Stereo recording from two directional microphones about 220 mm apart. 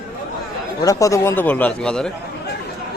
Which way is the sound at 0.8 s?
15° left (ahead or behind).